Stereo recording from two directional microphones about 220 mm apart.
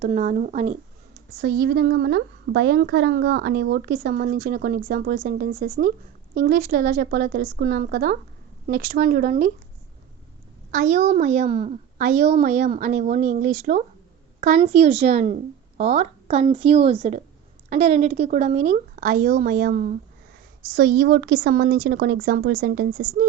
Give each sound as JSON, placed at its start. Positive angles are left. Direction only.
{"t": 0.0, "sound": "a woman's voice", "side_deg": -35}
{"t": 1.4, "sound": "a woman's voice", "side_deg": -45}
{"t": 10.7, "sound": "a woman's voice", "side_deg": -35}